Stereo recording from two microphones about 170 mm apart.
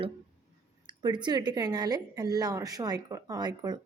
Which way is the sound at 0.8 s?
25° right (ahead or behind).